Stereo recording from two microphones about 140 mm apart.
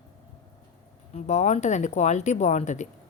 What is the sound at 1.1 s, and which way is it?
Speech, 55° left (ahead or behind).